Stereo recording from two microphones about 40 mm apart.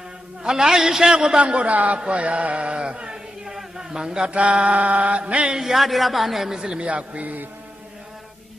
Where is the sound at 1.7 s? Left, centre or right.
Right.